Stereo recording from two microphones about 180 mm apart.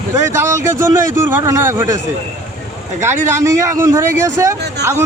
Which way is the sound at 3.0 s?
15° right (ahead or behind).